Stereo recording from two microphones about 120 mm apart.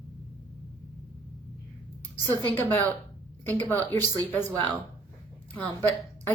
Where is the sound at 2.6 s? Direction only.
15° left (ahead or behind).